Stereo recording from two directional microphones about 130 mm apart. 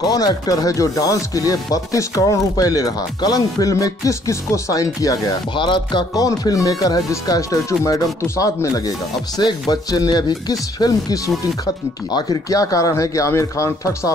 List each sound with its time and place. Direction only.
0.0 s speech: 30° left (ahead or behind)